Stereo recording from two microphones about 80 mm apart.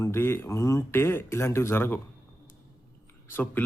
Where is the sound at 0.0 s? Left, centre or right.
Left.